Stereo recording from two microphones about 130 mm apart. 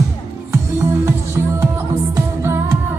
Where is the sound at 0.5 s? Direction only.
20° right (ahead or behind).